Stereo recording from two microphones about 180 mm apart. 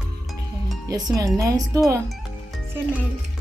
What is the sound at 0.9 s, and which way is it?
Speech, 20° right (ahead or behind).